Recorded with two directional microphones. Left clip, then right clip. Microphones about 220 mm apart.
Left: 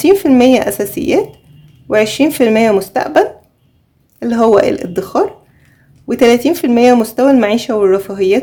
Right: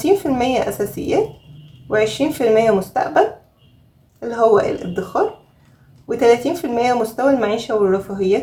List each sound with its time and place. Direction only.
0.0 s speech: 50° left (ahead or behind)